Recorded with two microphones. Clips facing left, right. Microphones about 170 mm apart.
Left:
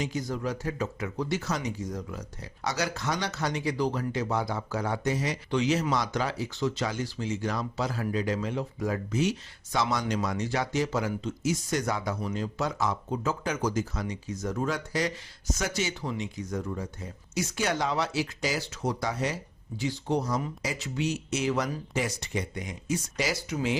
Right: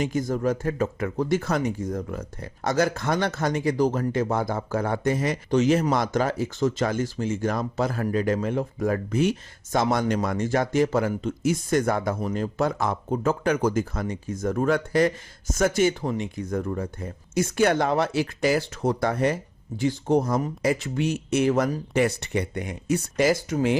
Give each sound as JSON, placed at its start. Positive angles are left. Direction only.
{"t": 0.0, "sound": "speech", "side_deg": -50}